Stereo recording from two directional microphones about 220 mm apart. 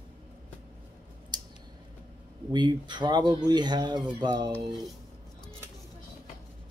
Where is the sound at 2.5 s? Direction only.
20° right (ahead or behind).